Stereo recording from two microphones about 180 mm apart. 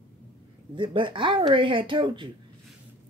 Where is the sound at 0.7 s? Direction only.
25° right (ahead or behind).